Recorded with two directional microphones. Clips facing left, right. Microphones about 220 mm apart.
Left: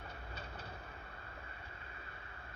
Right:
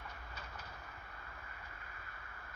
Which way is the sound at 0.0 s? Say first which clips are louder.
Left 3 dB; 30° left (ahead or behind).